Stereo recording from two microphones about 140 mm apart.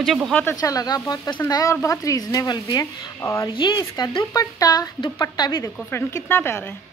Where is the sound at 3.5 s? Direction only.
30° left (ahead or behind).